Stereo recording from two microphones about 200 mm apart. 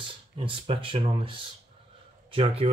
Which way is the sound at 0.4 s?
25° right (ahead or behind).